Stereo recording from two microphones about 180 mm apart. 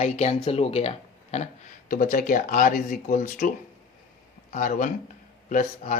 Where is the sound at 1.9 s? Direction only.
50° left (ahead or behind).